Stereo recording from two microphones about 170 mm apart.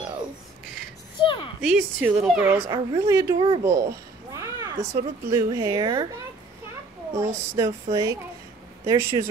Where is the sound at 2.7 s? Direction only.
20° right (ahead or behind).